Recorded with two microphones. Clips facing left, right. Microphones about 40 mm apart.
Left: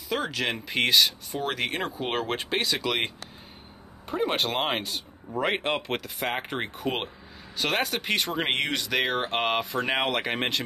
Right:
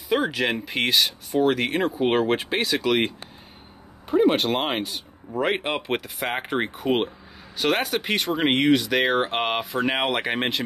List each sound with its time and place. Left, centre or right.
0.1 s speech: centre
4.1 s speech: centre